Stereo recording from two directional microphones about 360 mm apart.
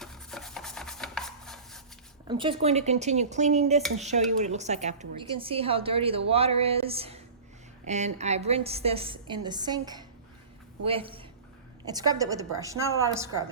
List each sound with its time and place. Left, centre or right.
0.0 s rub: centre
2.2 s a woman's voice: centre